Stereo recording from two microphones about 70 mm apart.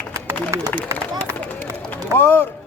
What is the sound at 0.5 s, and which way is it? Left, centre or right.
Speech, right.